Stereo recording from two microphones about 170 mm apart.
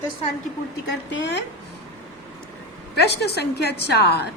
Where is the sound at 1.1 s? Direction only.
90° left.